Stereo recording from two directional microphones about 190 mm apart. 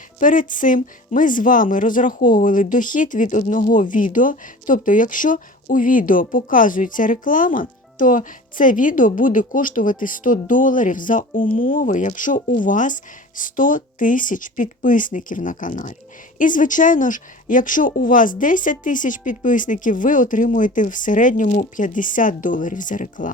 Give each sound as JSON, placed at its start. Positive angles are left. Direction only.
{"t": 0.2, "sound": "speech", "side_deg": 45}